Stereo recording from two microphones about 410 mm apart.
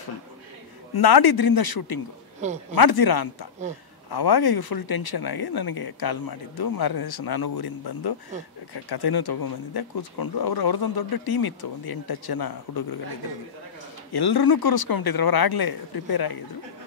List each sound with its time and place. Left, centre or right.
0.9 s speech: left
14.1 s speech: left